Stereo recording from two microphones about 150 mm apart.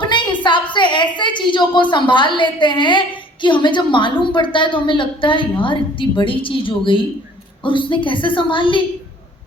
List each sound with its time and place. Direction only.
0.0 s a woman's voice: 30° left (ahead or behind)